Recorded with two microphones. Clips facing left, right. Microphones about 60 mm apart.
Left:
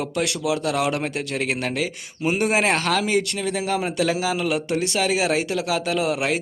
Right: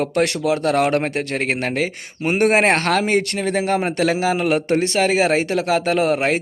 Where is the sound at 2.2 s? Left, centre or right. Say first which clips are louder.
Right 5 dB; right.